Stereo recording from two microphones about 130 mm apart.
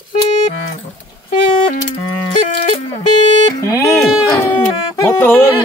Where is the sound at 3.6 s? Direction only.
25° left (ahead or behind).